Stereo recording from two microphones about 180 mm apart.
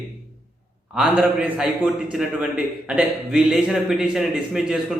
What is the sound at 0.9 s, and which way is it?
Speech, 5° right (ahead or behind).